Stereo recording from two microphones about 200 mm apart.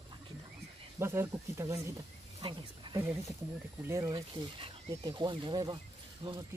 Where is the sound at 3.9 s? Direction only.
15° right (ahead or behind).